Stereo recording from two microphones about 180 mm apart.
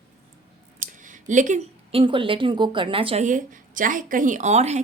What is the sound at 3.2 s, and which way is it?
A woman's voice, 45° right (ahead or behind).